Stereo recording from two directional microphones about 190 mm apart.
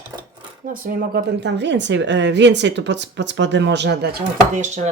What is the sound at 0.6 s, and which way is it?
Speech, 45° right (ahead or behind).